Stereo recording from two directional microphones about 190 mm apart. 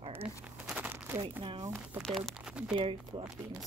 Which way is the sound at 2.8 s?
30° right (ahead or behind).